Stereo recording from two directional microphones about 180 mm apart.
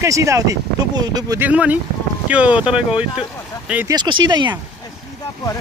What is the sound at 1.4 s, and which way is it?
Speech, 10° right (ahead or behind).